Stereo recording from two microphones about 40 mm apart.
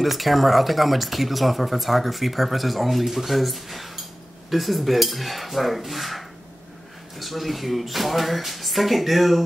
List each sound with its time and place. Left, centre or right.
0.0 s speech: centre